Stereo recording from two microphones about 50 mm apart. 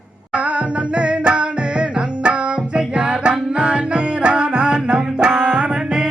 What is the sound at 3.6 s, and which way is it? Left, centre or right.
Music, right.